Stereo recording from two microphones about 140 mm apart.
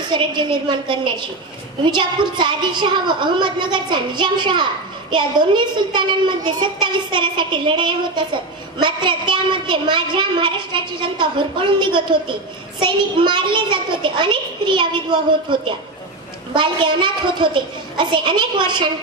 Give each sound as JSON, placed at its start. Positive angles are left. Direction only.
{"t": 0.1, "sound": "a woman's voice", "side_deg": -35}
{"t": 5.9, "sound": "a woman's voice", "side_deg": -35}